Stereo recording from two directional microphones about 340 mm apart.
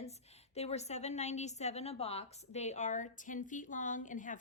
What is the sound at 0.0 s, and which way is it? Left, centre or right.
A woman's voice, centre.